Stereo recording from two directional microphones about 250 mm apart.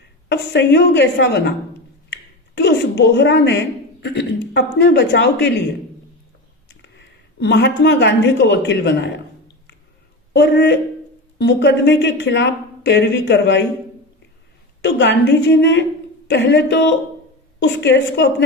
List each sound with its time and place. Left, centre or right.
0.3 s speech: left
2.6 s a woman's voice: left
6.7 s speech: left
10.3 s speech: left
14.8 s speech: left